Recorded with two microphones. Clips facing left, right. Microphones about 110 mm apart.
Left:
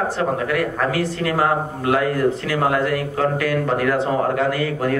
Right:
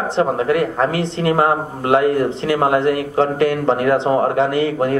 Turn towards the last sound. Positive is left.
turn(degrees=-25)  # may be behind; listen again after turning